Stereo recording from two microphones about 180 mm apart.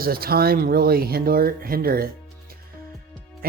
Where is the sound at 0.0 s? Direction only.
55° right (ahead or behind).